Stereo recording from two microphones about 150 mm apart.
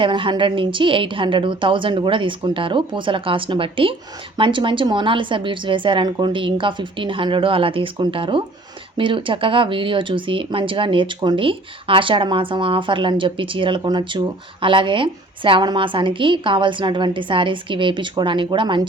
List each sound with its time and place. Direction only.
0.0 s speech: 35° right (ahead or behind)